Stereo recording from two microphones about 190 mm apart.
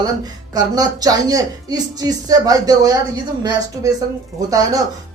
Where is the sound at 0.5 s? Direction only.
20° right (ahead or behind).